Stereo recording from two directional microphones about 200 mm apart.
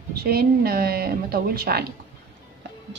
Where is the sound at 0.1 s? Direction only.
50° right (ahead or behind).